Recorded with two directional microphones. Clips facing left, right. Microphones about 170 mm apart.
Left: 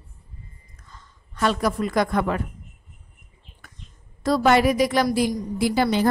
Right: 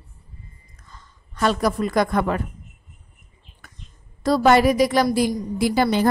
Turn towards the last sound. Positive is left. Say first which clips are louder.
# right 1 dB
turn(degrees=-45)  # may be behind; listen again after turning